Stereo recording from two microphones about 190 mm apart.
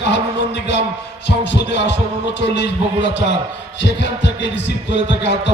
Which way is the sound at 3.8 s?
70° left (ahead or behind).